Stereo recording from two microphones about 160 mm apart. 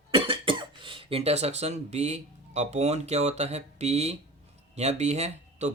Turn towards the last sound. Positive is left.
turn(degrees=-45)  # may be behind; listen again after turning